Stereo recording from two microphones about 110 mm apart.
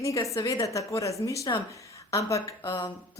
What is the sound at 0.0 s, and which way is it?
A woman's voice, 30° left (ahead or behind).